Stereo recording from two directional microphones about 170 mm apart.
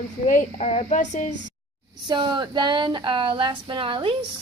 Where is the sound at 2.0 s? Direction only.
25° right (ahead or behind).